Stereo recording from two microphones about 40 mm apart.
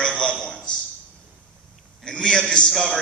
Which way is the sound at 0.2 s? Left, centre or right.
Centre.